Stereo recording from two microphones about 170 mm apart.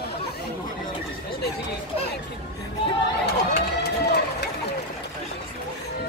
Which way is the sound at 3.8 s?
75° left (ahead or behind).